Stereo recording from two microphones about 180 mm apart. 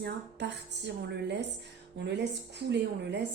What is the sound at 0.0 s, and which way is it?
A woman's voice, 70° right (ahead or behind).